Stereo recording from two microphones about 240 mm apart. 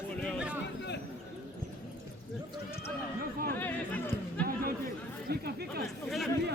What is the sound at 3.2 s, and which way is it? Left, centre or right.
Chatter, right.